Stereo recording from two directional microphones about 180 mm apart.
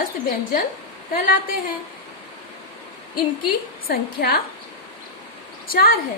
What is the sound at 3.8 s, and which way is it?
Speech, 55° left (ahead or behind).